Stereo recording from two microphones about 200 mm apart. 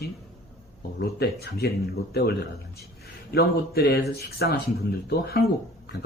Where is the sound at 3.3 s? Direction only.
50° left (ahead or behind).